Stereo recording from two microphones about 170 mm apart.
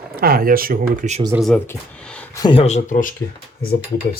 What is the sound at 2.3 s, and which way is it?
Speech, 25° left (ahead or behind).